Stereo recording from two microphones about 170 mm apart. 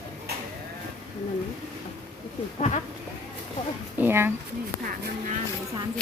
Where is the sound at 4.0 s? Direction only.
15° right (ahead or behind).